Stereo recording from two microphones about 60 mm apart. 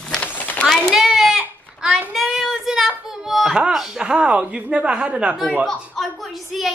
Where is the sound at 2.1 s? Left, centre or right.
Centre.